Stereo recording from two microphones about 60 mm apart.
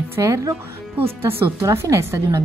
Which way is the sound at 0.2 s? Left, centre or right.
Right.